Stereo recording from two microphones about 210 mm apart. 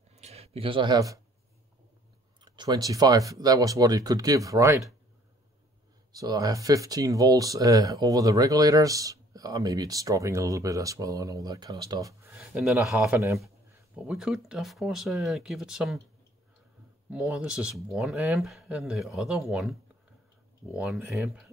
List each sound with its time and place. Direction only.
0.1 s a sound: 30° right (ahead or behind)
2.4 s speech: 20° right (ahead or behind)
6.1 s speech: 15° right (ahead or behind)
12.4 s speech: 5° right (ahead or behind)
17.1 s speech: 5° right (ahead or behind)
20.7 s speech: centre (ahead or behind)
21.0 s speech: 10° right (ahead or behind)